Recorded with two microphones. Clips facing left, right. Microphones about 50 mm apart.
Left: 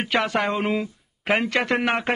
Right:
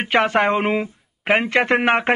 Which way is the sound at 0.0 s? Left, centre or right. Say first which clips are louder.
Right 5 dB; right.